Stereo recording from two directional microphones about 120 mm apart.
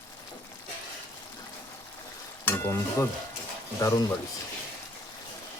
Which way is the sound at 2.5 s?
20° left (ahead or behind).